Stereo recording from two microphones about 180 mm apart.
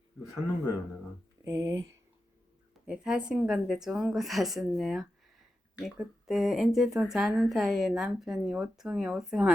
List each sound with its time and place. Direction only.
1.5 s speech: 15° right (ahead or behind)
2.8 s speech: 5° right (ahead or behind)